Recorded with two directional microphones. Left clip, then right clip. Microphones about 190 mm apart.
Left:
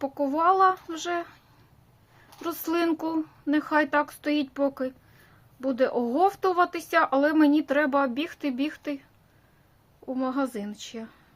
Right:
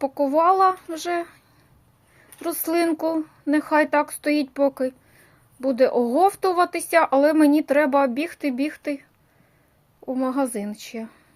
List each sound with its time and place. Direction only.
0.0 s a woman's voice: 15° right (ahead or behind)
2.4 s a woman's voice: 10° right (ahead or behind)
10.1 s a woman's voice: 15° right (ahead or behind)